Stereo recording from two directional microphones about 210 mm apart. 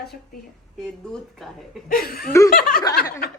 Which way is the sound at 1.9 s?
45° left (ahead or behind).